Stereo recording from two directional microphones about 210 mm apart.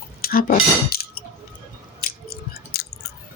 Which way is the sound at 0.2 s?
45° left (ahead or behind).